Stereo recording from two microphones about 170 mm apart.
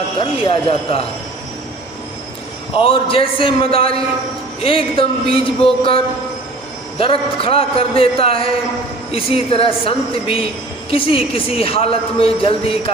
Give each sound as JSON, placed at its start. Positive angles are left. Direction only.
{"t": 0.2, "sound": "a man's voice", "side_deg": 30}
{"t": 2.7, "sound": "a man's voice", "side_deg": 30}
{"t": 7.0, "sound": "a man's voice", "side_deg": 35}